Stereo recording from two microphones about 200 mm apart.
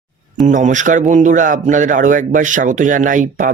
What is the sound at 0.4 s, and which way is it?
A man's voice, 40° right (ahead or behind).